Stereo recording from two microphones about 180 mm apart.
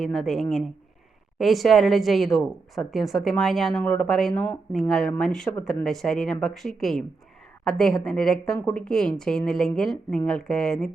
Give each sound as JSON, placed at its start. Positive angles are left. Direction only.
{"t": 0.0, "sound": "a woman's voice", "side_deg": 0}